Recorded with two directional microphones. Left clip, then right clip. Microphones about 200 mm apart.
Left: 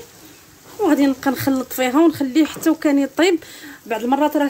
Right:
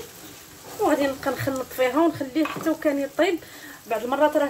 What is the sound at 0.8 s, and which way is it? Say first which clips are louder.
Speech: left 5 dB; 60° left (ahead or behind).